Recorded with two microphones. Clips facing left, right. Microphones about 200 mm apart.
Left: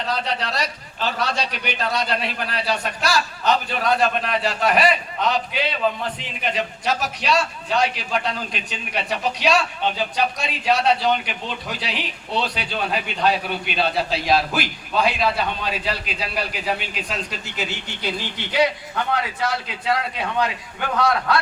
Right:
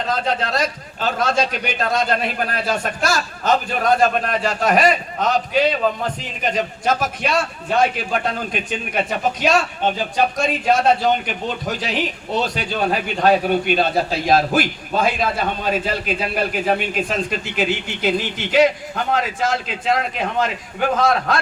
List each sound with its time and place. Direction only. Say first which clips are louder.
0.1 s a man's voice: right 4 dB; 45° right (ahead or behind)